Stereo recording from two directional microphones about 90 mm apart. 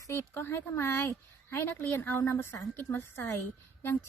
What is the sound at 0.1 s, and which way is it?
A woman's voice, 25° left (ahead or behind).